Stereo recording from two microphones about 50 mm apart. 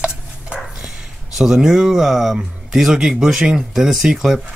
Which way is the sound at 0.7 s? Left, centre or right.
Centre.